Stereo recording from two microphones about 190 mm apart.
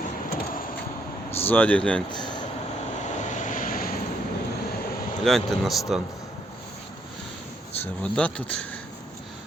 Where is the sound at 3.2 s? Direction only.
40° left (ahead or behind).